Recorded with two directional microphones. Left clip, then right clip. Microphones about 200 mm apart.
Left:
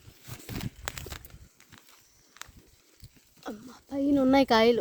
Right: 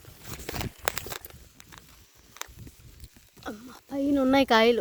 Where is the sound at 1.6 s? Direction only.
40° right (ahead or behind).